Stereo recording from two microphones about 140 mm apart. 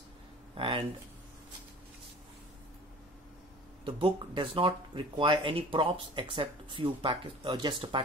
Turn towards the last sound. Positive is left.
turn(degrees=-35)  # may be behind; listen again after turning